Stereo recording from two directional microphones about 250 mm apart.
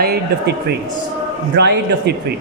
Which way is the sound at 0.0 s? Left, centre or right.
Right.